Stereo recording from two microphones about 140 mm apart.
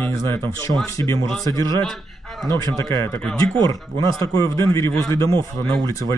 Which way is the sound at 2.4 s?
20° left (ahead or behind).